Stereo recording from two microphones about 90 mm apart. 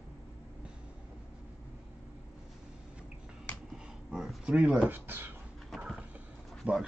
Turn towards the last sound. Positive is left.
turn(degrees=-15)  # may be behind; listen again after turning